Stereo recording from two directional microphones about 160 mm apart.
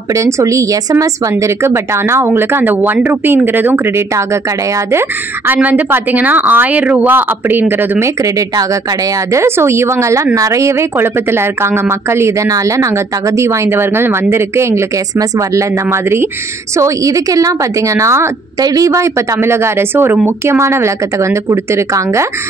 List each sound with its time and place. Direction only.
0.1 s speech: 20° right (ahead or behind)
5.5 s a woman's voice: 10° right (ahead or behind)